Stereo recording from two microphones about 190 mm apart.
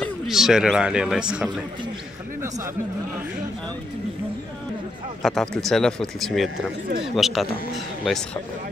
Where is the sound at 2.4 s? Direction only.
15° right (ahead or behind).